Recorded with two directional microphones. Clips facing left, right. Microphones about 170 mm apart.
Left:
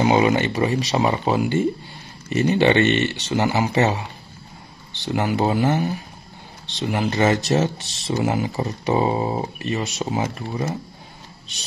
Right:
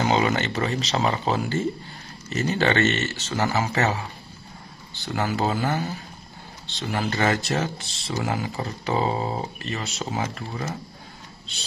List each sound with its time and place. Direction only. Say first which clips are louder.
0.0 s speech: left 5 dB; 15° left (ahead or behind)
5.0 s speech: left 4 dB; 20° left (ahead or behind)